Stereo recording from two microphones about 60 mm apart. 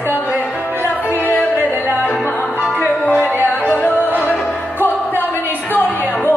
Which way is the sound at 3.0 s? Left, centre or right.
Left.